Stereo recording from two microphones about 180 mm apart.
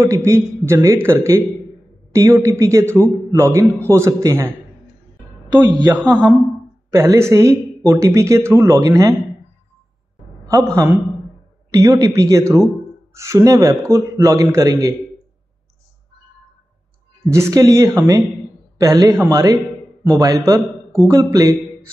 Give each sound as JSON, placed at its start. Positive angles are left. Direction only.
{"t": 0.0, "sound": "a man's voice", "side_deg": -15}
{"t": 6.1, "sound": "a woman's voice", "side_deg": 5}
{"t": 6.9, "sound": "a man's voice", "side_deg": -15}
{"t": 10.4, "sound": "a man's voice", "side_deg": -15}
{"t": 17.3, "sound": "a man's voice", "side_deg": -20}